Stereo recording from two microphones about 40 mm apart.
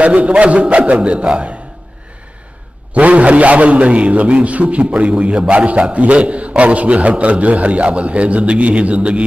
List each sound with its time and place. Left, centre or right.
0.0 s a man's voice: right
2.9 s a man's voice: right